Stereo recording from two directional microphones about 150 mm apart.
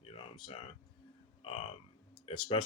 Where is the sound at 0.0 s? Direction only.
35° left (ahead or behind).